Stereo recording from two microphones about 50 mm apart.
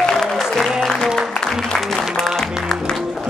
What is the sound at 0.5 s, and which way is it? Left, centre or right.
Music, centre.